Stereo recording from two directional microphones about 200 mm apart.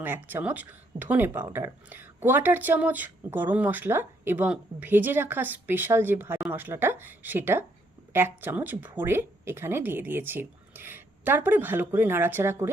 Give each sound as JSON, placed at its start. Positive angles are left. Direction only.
{"t": 0.0, "sound": "speech", "side_deg": -10}